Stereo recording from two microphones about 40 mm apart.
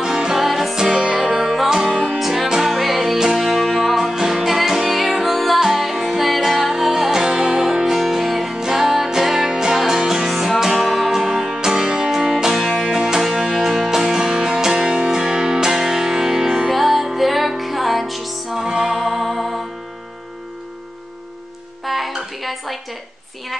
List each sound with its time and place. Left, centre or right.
0.0 s music: centre
0.4 s music: centre
1.9 s music: right
2.1 s music: centre
18.6 s music: centre
21.8 s music: centre
22.4 s dishes: centre